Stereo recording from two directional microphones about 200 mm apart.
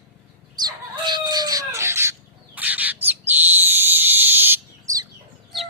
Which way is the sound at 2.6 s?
10° right (ahead or behind).